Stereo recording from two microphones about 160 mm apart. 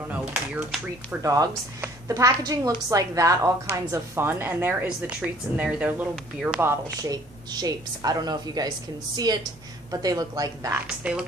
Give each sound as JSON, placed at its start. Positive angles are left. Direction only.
{"t": 1.1, "sound": "a woman's voice", "side_deg": -20}
{"t": 11.0, "sound": "speech", "side_deg": -10}